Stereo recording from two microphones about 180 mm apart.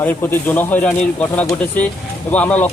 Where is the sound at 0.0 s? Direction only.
10° left (ahead or behind).